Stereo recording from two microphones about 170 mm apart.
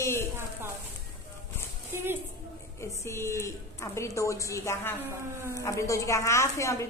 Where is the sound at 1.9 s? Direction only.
15° right (ahead or behind).